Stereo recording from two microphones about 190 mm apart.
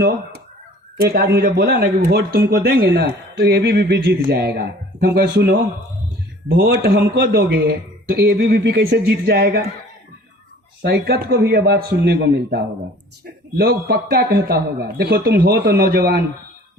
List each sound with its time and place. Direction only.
0.9 s a man's voice: 55° right (ahead or behind)
10.8 s a man's voice: 55° right (ahead or behind)